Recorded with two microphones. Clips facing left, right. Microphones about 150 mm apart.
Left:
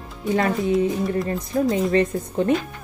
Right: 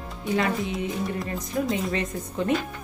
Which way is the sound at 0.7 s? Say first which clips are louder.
Left 8 dB; centre (ahead or behind).